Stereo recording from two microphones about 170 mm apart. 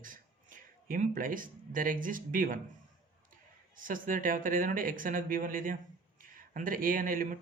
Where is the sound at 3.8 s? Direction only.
55° right (ahead or behind).